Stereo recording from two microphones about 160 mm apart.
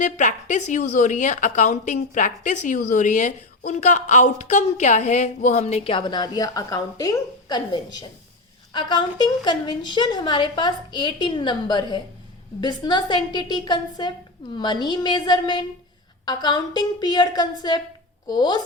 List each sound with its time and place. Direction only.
0.0 s a woman's voice: 50° left (ahead or behind); by 18.6 s 25° left (ahead or behind)